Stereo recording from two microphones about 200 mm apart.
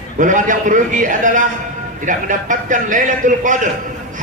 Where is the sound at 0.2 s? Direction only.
40° right (ahead or behind).